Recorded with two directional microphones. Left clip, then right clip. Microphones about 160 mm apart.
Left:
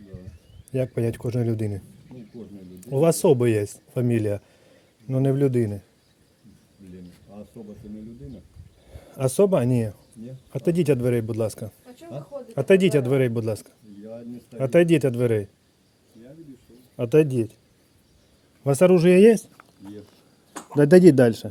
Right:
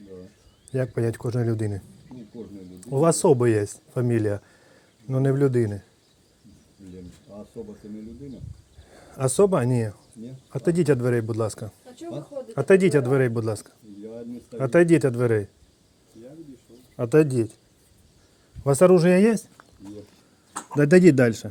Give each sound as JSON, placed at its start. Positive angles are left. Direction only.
{"t": 0.7, "sound": "speech", "side_deg": 20}
{"t": 2.8, "sound": "speech", "side_deg": 15}
{"t": 8.9, "sound": "speech", "side_deg": 10}
{"t": 17.0, "sound": "speech", "side_deg": 10}
{"t": 18.6, "sound": "speech", "side_deg": 15}
{"t": 20.7, "sound": "speech", "side_deg": 15}